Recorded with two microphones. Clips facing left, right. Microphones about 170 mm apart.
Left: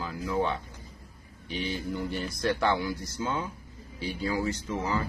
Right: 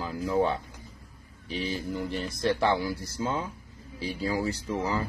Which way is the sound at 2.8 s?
30° right (ahead or behind).